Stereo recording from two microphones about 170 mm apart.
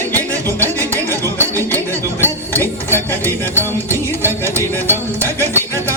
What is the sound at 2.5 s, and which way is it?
Dishes, 15° left (ahead or behind).